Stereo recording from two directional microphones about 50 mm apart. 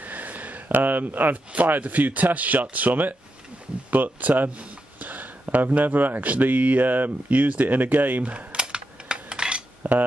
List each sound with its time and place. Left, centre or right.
0.0 s speech: right; by 9.6 s centre
9.8 s speech: right